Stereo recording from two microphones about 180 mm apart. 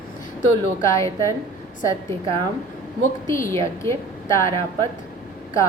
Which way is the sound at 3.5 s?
15° left (ahead or behind).